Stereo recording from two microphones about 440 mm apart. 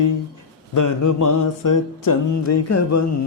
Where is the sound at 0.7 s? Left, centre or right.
Left.